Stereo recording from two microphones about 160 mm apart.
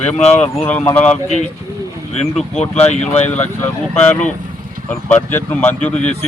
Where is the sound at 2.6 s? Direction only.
40° left (ahead or behind).